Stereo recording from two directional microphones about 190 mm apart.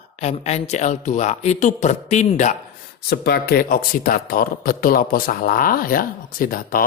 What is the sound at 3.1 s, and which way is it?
Speech, 55° left (ahead or behind).